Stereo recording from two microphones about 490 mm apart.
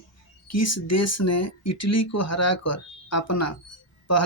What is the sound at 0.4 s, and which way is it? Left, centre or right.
Speech, left.